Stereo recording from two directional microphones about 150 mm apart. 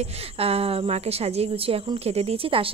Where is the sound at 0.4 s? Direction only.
40° right (ahead or behind).